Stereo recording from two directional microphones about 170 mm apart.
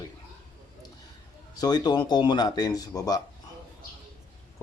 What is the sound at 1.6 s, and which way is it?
Speech, 25° left (ahead or behind).